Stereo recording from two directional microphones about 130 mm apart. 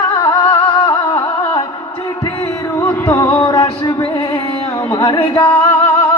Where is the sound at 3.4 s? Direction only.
30° left (ahead or behind).